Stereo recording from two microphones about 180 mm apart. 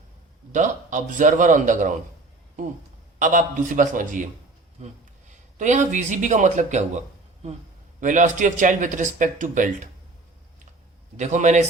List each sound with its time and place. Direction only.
0.5 s speech: 45° right (ahead or behind)
3.2 s speech: 45° right (ahead or behind)
5.3 s speech: 45° right (ahead or behind)
8.0 s speech: 45° right (ahead or behind)
11.2 s a man's voice: 40° right (ahead or behind)